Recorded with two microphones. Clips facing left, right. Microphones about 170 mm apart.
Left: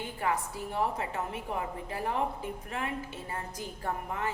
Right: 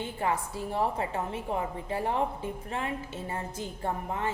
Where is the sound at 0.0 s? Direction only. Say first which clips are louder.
Right 2 dB; 25° right (ahead or behind).